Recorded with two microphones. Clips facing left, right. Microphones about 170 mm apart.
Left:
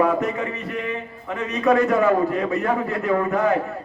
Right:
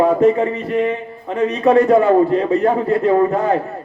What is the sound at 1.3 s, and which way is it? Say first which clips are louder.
A man's voice: right 6 dB; 35° right (ahead or behind).